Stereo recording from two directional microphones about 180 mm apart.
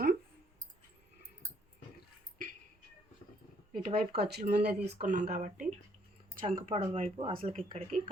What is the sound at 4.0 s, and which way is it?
Speech, 60° right (ahead or behind).